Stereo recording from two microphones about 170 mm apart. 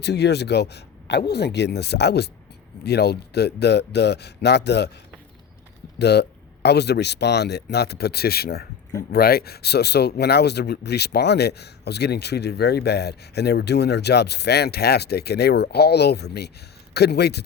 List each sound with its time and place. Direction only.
0.0 s speech: 80° left
6.0 s speech: 75° left (ahead or behind)